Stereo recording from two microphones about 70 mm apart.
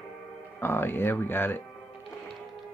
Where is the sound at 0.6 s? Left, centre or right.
Left.